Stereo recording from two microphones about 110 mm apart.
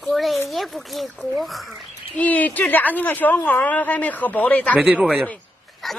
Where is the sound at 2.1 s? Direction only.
15° left (ahead or behind).